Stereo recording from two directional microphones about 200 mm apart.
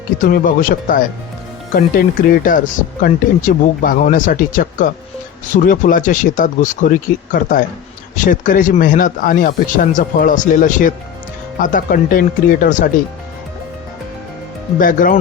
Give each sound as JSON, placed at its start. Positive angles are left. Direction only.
{"t": 0.2, "sound": "speech", "side_deg": 45}
{"t": 14.8, "sound": "speech", "side_deg": 45}